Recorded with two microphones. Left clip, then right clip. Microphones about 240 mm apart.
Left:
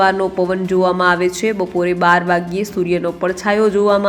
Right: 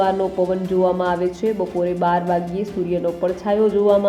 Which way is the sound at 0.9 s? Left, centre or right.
Centre.